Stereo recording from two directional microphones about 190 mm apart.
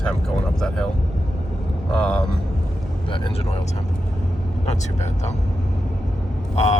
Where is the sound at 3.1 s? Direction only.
25° left (ahead or behind).